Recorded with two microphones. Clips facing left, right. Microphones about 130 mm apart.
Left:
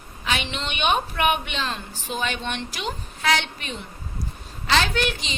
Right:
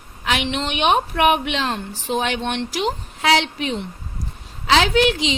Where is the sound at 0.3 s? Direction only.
75° right (ahead or behind).